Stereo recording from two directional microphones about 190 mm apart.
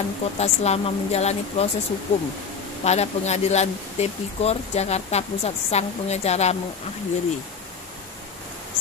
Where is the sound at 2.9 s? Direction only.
35° left (ahead or behind).